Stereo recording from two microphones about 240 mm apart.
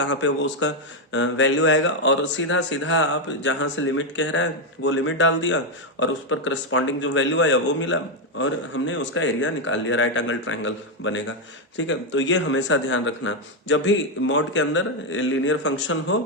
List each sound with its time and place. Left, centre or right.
0.0 s speech: left